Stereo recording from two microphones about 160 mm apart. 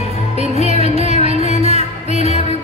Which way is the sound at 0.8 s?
40° right (ahead or behind).